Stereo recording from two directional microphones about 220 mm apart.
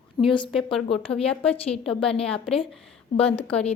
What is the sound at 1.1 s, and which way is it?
Speech, 25° left (ahead or behind).